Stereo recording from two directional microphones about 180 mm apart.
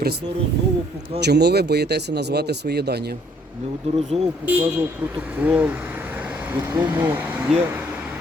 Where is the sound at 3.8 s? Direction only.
35° right (ahead or behind).